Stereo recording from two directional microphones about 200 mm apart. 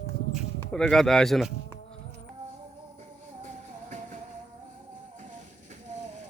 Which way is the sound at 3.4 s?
40° right (ahead or behind).